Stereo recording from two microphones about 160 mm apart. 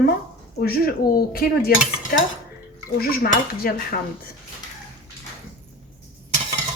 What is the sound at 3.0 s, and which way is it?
Cutlery, 70° left (ahead or behind).